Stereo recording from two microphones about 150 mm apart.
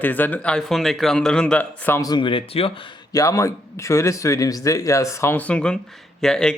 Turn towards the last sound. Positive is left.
turn(degrees=5)  # may be behind; listen again after turning